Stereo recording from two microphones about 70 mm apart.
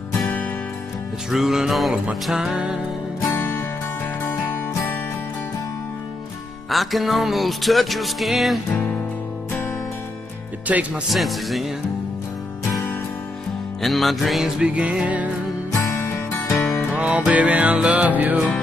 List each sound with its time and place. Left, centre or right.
1.3 s music: centre
3.3 s music: left
6.7 s music: centre
10.7 s music: right
11.1 s music: centre
13.7 s music: centre
14.6 s music: centre
15.9 s music: left
16.9 s music: centre